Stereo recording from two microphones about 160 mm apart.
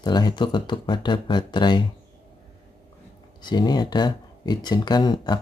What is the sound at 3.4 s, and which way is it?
A man's voice, 25° left (ahead or behind).